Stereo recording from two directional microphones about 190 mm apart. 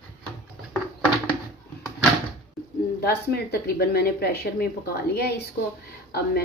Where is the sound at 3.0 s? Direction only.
55° left (ahead or behind).